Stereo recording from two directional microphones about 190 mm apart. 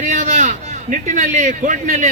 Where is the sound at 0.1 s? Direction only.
40° right (ahead or behind).